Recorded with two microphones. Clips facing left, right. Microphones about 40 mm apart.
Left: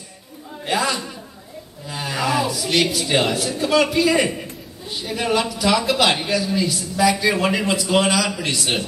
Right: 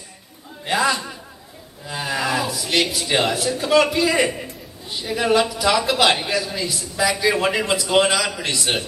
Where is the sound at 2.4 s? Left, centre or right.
Centre.